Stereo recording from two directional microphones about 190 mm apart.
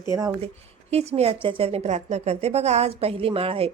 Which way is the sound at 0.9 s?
35° right (ahead or behind).